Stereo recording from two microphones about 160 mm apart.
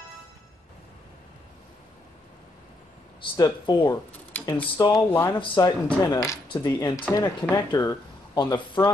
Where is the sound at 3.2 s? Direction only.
30° left (ahead or behind).